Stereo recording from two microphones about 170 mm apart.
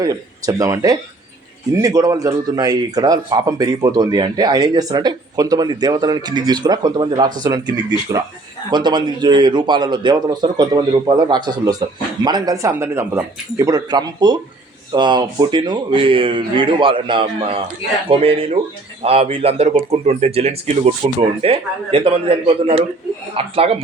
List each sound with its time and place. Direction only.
0.0 s speech: 20° right (ahead or behind)